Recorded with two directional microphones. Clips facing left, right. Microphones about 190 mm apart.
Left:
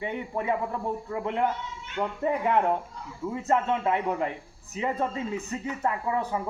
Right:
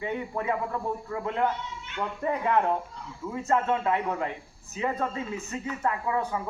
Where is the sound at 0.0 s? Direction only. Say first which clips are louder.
Even; 20° left (ahead or behind).